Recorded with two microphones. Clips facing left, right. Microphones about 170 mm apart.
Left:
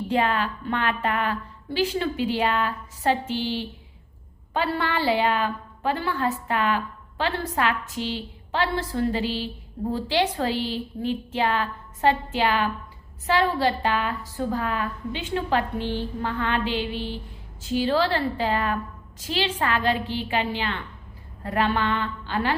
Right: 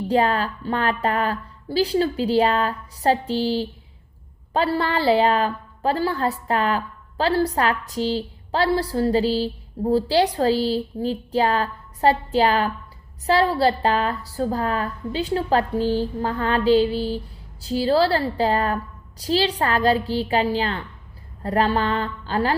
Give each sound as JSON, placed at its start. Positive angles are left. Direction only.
{"t": 0.1, "sound": "a woman's voice", "side_deg": -40}